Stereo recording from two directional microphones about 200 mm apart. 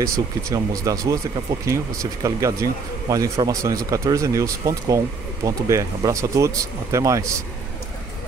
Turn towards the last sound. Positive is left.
turn(degrees=-15)  # may be behind; listen again after turning